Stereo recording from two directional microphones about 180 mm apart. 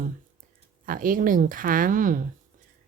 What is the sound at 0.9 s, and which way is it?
Speech, 50° right (ahead or behind).